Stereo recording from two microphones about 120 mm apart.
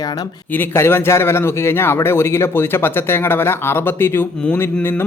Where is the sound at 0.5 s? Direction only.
15° left (ahead or behind).